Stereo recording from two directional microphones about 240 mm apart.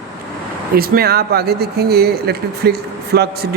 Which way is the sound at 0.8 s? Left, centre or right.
Right.